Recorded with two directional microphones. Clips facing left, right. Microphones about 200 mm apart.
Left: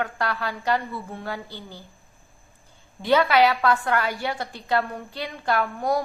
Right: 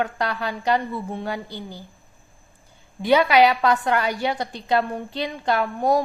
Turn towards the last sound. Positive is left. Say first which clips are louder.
# right 3 dB
turn(degrees=-20)  # may be behind; listen again after turning